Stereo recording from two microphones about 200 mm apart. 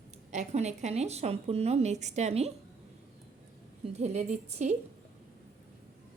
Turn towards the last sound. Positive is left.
turn(degrees=-35)  # may be behind; listen again after turning